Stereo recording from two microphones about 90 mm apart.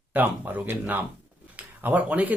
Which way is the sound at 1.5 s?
20° right (ahead or behind).